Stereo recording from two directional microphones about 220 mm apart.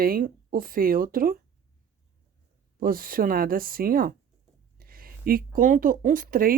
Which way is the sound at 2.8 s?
40° right (ahead or behind).